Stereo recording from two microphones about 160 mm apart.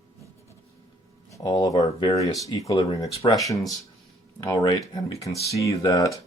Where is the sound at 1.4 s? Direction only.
25° left (ahead or behind).